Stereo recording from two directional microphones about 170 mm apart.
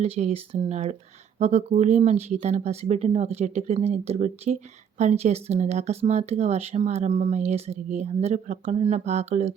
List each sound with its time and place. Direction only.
0.0 s speech: 40° right (ahead or behind)